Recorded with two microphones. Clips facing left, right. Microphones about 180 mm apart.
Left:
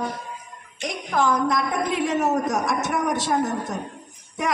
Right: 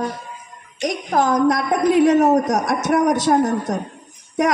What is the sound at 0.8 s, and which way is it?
A man's voice, 40° right (ahead or behind).